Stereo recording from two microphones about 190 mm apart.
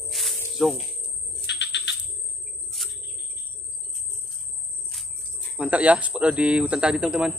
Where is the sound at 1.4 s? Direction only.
65° left (ahead or behind).